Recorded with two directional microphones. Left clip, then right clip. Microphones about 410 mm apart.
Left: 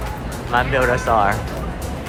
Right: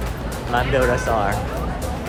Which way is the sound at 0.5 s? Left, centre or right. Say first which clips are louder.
Left 2 dB; centre.